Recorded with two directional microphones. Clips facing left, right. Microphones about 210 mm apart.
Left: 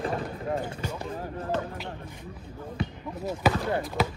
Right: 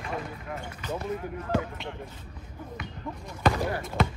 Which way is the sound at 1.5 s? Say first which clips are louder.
Right 3 dB; 10° right (ahead or behind).